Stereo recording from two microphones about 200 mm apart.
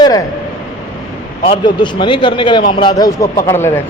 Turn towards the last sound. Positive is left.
turn(degrees=10)  # may be behind; listen again after turning